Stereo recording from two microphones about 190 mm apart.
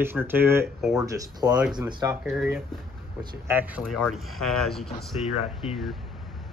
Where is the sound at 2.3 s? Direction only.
5° right (ahead or behind).